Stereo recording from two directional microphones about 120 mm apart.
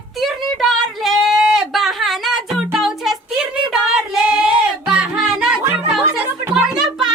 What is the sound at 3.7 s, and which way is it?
Female singing, 5° right (ahead or behind).